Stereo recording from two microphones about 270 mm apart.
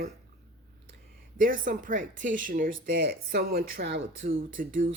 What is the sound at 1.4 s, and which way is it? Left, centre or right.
Speech, right.